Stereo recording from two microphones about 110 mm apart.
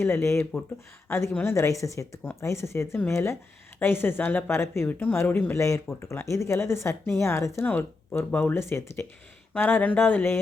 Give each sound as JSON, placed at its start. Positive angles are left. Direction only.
{"t": 0.0, "sound": "speech", "side_deg": 25}
{"t": 5.5, "sound": "speech", "side_deg": 25}